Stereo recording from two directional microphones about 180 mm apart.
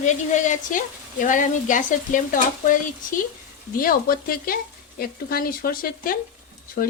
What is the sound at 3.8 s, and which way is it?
Frying, 55° left (ahead or behind).